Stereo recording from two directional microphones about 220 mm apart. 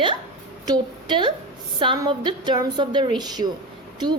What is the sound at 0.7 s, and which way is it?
A woman's voice, 20° right (ahead or behind).